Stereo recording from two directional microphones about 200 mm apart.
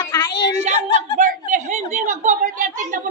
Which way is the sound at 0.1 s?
20° left (ahead or behind).